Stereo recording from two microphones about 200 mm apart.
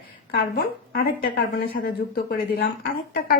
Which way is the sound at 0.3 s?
55° left (ahead or behind).